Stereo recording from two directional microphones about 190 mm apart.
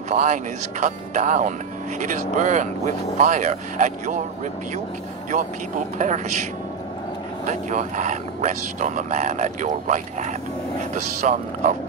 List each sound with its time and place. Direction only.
0.1 s speech: 40° right (ahead or behind)
5.3 s speech: 40° right (ahead or behind)
7.4 s speech: 40° right (ahead or behind)